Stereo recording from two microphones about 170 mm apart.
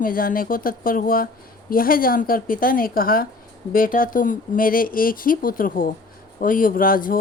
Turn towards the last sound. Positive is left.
turn(degrees=55)  # may be behind; listen again after turning